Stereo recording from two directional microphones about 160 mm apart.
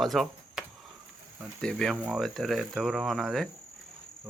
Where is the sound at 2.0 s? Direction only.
10° right (ahead or behind).